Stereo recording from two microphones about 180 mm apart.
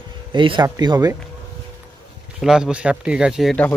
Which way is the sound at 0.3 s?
25° right (ahead or behind).